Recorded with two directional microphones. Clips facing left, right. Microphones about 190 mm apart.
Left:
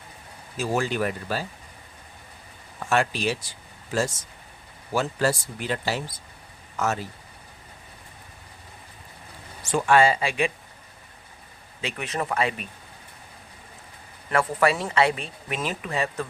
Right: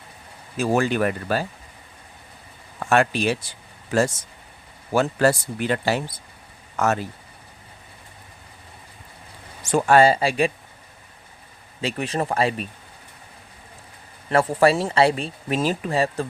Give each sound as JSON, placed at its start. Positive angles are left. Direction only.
{"t": 0.5, "sound": "speech", "side_deg": -60}
{"t": 2.9, "sound": "speech", "side_deg": -55}
{"t": 4.9, "sound": "speech", "side_deg": -60}
{"t": 9.6, "sound": "speech", "side_deg": -40}
{"t": 11.8, "sound": "speech", "side_deg": -35}
{"t": 14.3, "sound": "speech", "side_deg": -30}